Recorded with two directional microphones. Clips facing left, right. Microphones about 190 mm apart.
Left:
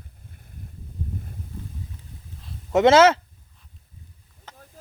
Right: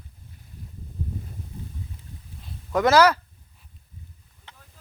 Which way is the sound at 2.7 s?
25° left (ahead or behind).